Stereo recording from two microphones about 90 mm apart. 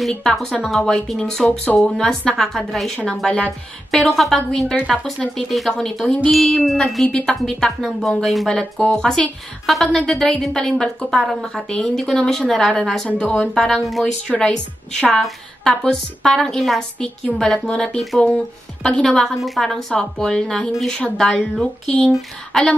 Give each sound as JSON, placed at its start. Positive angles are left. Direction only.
{"t": 0.0, "sound": "a woman's voice", "side_deg": 5}
{"t": 13.1, "sound": "a woman's voice", "side_deg": 15}
{"t": 13.7, "sound": "a woman's voice", "side_deg": 0}